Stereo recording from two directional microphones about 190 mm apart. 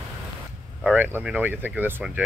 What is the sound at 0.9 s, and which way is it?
Speech, 5° right (ahead or behind).